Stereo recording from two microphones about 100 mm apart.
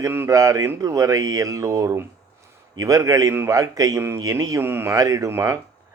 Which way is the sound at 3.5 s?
35° right (ahead or behind).